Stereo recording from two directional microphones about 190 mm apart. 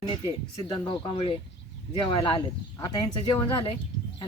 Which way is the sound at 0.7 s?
25° left (ahead or behind).